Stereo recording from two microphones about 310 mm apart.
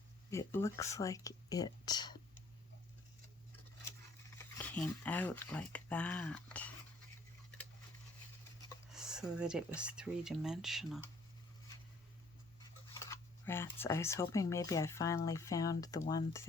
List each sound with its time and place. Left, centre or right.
0.3 s speech: centre
4.4 s speech: centre
8.9 s speech: centre
13.1 s speech: centre